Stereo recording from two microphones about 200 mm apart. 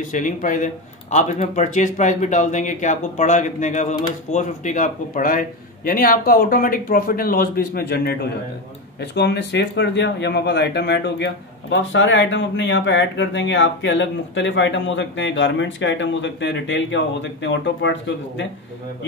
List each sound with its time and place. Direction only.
0.1 s a man's voice: 40° left (ahead or behind); by 18.5 s 65° left (ahead or behind)